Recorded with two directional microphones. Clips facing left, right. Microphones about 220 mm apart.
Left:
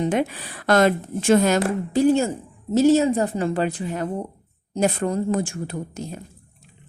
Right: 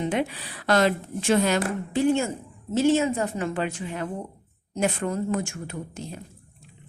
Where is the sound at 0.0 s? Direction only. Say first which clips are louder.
Left 4 dB; 45° left (ahead or behind).